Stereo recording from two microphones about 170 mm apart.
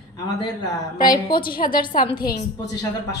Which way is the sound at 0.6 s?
25° left (ahead or behind).